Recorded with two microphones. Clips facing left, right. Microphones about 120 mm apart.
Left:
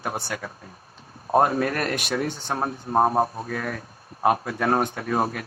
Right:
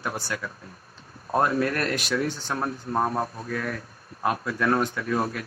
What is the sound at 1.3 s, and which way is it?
A man's voice, 40° left (ahead or behind).